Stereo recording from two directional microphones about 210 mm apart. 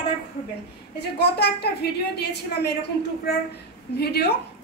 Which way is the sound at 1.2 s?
50° left (ahead or behind).